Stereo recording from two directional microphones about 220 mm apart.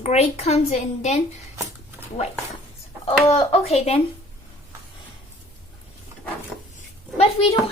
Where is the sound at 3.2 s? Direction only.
30° left (ahead or behind).